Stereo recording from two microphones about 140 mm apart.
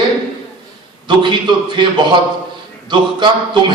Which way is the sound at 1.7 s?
35° right (ahead or behind).